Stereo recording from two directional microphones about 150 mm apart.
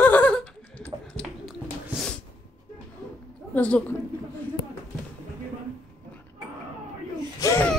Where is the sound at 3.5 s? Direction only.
10° left (ahead or behind).